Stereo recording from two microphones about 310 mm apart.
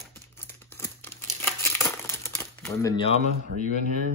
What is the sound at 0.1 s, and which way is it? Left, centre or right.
Crumpling, centre.